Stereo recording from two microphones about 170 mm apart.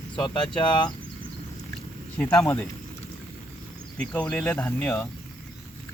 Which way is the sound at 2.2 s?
10° left (ahead or behind).